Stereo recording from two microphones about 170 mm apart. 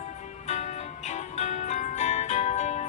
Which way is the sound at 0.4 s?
40° left (ahead or behind).